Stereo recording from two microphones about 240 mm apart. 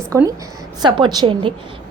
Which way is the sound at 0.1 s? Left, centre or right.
Centre.